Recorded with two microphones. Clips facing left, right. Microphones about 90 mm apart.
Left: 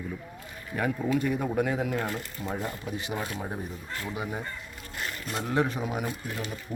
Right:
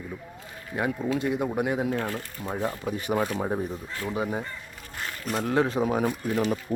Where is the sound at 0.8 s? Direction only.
25° right (ahead or behind).